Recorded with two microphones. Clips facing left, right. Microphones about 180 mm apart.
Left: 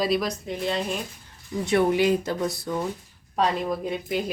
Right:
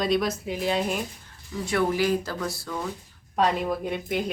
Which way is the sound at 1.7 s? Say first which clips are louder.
Left 3 dB; 25° left (ahead or behind).